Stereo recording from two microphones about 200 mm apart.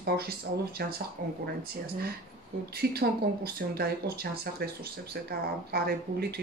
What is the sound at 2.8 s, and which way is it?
Speech, 50° right (ahead or behind).